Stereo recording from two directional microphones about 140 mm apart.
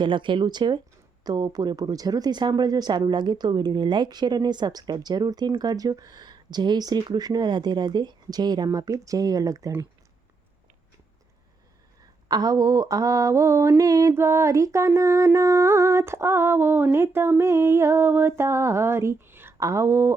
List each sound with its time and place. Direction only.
0.0 s speech: 35° right (ahead or behind)
12.3 s speech: 25° right (ahead or behind)